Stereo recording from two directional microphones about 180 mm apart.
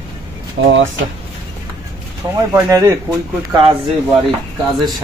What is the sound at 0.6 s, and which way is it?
Speech, 90° right.